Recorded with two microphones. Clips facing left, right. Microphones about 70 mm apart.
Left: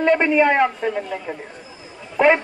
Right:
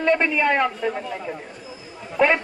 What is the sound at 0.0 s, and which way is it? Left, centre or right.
Speech, left.